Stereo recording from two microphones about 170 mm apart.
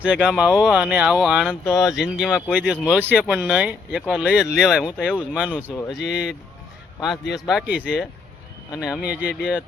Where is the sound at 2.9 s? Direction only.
10° right (ahead or behind).